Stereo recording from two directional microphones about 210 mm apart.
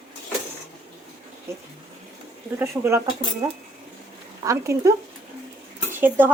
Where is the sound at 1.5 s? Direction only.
10° right (ahead or behind).